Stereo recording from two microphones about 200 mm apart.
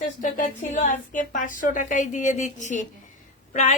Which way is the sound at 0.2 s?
40° left (ahead or behind).